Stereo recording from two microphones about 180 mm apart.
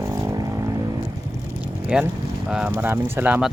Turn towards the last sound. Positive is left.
turn(degrees=-10)  # may be behind; listen again after turning